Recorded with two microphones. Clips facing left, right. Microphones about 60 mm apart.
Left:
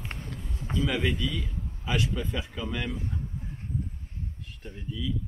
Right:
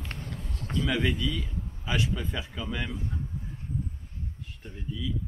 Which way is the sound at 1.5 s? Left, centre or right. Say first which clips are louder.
Left 1 dB; centre.